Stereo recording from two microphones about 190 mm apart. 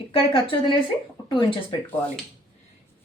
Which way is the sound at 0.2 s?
25° left (ahead or behind).